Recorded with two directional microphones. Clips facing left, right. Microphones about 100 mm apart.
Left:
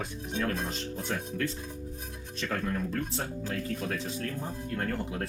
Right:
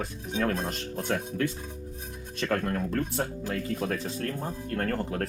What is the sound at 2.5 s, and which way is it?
Speech, 55° right (ahead or behind).